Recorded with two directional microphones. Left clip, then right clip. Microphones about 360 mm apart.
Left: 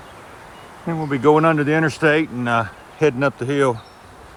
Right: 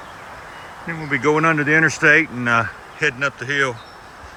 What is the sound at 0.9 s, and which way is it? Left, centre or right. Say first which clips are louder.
Speech: left 3 dB; centre.